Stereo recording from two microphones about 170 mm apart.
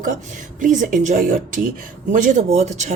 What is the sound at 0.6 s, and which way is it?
Speech, 50° right (ahead or behind).